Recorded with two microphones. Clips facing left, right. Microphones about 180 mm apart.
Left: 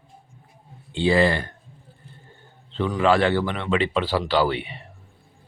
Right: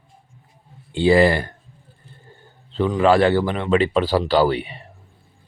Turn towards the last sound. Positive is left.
turn(degrees=-40)  # may be behind; listen again after turning